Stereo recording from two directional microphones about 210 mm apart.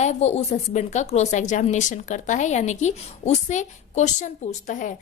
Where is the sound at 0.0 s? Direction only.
30° left (ahead or behind).